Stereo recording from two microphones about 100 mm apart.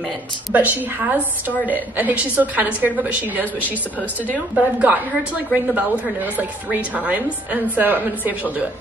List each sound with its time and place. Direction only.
0.5 s a woman's voice: 15° right (ahead or behind)